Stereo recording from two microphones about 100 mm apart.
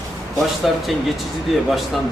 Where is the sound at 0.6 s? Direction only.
Centre (ahead or behind).